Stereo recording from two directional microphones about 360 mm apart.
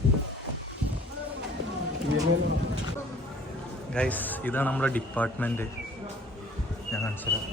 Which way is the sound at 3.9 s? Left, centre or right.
Centre.